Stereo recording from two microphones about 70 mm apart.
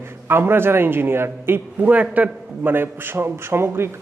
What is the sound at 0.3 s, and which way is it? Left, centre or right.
A man's voice, right.